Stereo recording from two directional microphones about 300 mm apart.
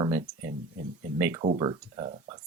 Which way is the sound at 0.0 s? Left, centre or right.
Centre.